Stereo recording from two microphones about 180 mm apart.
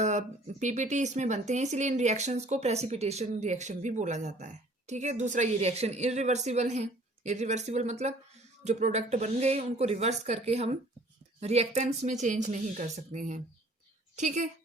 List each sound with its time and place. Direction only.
0.0 s speech: 40° right (ahead or behind)